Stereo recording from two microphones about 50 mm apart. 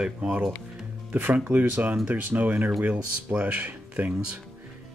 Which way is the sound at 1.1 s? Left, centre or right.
Right.